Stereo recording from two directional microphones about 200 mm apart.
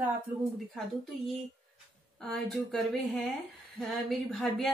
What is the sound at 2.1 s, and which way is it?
A woman's voice, centre (ahead or behind).